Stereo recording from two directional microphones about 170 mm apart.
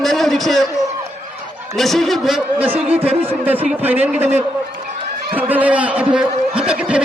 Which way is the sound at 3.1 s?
35° right (ahead or behind).